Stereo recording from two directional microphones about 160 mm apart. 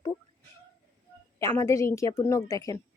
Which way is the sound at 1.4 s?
20° left (ahead or behind).